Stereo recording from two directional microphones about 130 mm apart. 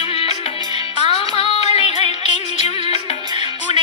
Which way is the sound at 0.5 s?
30° right (ahead or behind).